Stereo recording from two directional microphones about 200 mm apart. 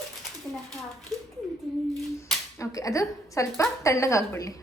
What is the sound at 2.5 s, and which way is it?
A woman's voice, 15° left (ahead or behind).